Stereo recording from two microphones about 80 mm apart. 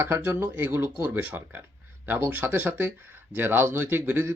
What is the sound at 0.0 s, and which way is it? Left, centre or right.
Speech, right.